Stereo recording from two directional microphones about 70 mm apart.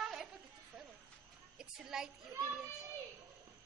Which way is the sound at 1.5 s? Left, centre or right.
Centre.